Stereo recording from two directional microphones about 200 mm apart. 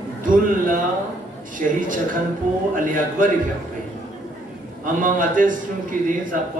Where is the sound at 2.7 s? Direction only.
40° right (ahead or behind).